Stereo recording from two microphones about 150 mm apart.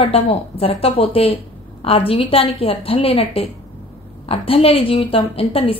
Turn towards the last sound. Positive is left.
turn(degrees=40)  # may be behind; listen again after turning